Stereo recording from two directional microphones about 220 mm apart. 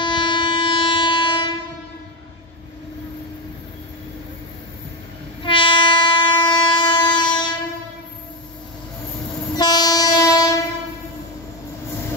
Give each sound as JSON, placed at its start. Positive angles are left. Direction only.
{"t": 0.0, "sound": "train", "side_deg": 20}
{"t": 5.4, "sound": "train", "side_deg": 20}
{"t": 9.6, "sound": "train", "side_deg": 20}